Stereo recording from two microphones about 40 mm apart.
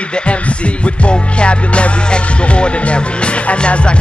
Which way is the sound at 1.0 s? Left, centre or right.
Left.